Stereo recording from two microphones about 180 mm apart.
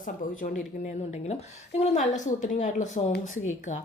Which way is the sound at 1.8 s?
40° left (ahead or behind).